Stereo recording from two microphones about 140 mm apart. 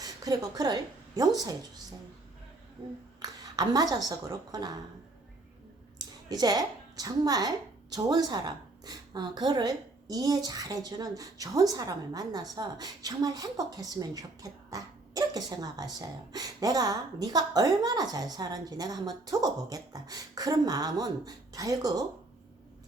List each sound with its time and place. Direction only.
0.0 s a woman's voice: 25° right (ahead or behind)
3.2 s speech: 25° right (ahead or behind)
6.2 s a woman's voice: 25° right (ahead or behind)